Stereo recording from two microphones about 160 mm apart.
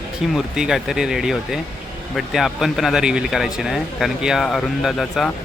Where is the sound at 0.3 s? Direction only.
5° right (ahead or behind).